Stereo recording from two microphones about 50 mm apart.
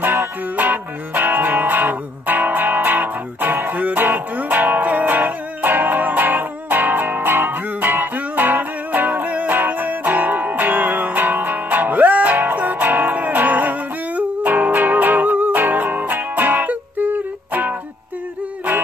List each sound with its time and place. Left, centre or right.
0.0 s music: right